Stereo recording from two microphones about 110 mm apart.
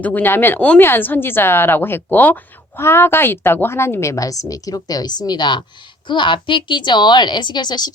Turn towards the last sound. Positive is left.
turn(degrees=40)  # may be behind; listen again after turning